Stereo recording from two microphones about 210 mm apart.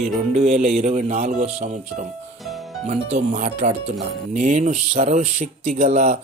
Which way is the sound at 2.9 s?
30° right (ahead or behind).